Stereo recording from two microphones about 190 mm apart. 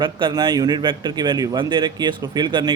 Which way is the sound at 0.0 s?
25° right (ahead or behind).